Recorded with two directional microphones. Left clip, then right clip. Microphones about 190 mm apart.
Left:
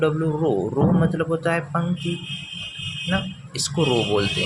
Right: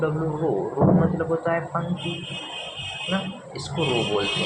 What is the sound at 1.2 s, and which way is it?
Speech, 55° left (ahead or behind).